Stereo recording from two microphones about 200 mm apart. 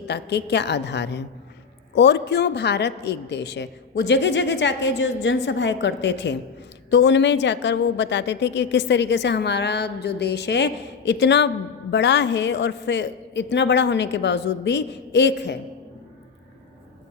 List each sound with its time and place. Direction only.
0.1 s a woman's voice: 60° left (ahead or behind)